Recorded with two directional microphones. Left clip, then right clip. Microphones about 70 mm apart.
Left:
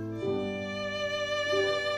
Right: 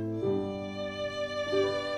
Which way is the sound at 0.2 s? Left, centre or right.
Left.